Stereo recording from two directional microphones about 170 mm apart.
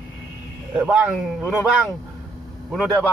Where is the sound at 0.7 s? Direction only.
5° right (ahead or behind).